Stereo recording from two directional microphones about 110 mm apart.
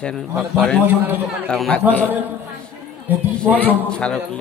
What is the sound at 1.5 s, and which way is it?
Speech, 5° left (ahead or behind).